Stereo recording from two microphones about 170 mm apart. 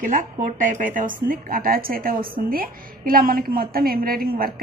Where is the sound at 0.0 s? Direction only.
50° right (ahead or behind).